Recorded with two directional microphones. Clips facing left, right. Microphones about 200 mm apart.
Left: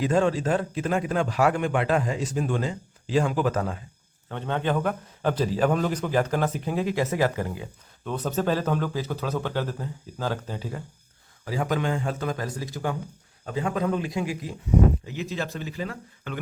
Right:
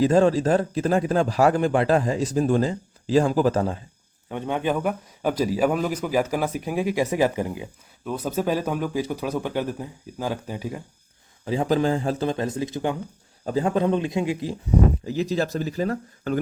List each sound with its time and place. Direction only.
0.0 s a man's voice: 35° right (ahead or behind)
4.3 s a man's voice: 15° right (ahead or behind)
11.4 s speech: 25° right (ahead or behind)
13.4 s speech: 35° right (ahead or behind)
15.0 s a man's voice: 35° right (ahead or behind)